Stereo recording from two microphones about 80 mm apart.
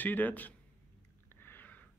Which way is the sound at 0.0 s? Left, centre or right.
Left.